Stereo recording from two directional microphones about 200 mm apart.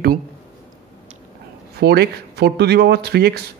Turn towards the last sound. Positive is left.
turn(degrees=-55)  # may be behind; listen again after turning